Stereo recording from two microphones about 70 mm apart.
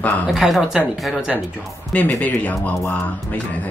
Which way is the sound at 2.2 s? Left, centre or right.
Left.